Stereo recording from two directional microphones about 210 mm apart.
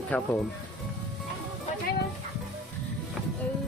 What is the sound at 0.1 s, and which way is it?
Speech, 5° left (ahead or behind).